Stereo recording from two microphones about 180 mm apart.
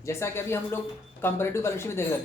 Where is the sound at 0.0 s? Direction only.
15° left (ahead or behind).